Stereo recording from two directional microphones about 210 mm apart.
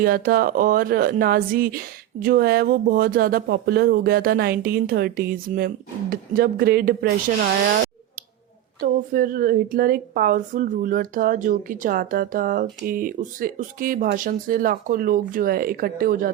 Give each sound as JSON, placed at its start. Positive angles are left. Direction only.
{"t": 0.0, "sound": "speech", "side_deg": -45}
{"t": 8.8, "sound": "a woman's voice", "side_deg": -40}